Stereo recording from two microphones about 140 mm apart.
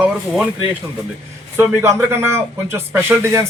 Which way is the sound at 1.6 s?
15° right (ahead or behind).